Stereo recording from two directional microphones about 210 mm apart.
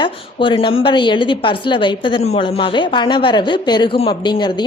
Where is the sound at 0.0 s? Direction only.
25° left (ahead or behind).